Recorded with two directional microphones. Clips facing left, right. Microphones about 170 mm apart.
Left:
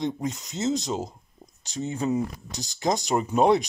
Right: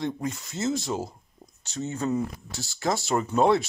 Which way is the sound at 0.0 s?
20° left (ahead or behind).